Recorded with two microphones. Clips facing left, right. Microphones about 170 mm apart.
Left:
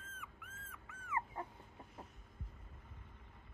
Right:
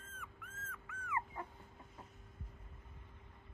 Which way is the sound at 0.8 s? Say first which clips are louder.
Even; 20° left (ahead or behind).